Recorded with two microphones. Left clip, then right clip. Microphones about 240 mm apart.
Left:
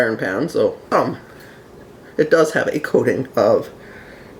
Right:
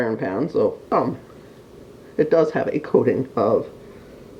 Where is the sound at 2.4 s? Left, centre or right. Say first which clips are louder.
Left 3 dB; left.